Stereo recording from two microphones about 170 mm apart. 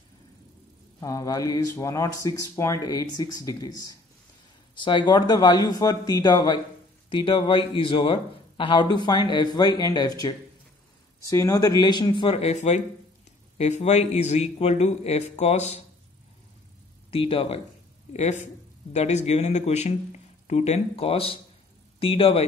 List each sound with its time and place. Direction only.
1.0 s a man's voice: 20° left (ahead or behind); by 15.8 s 40° left (ahead or behind)
17.1 s speech: 30° left (ahead or behind)
18.1 s speech: 45° left (ahead or behind)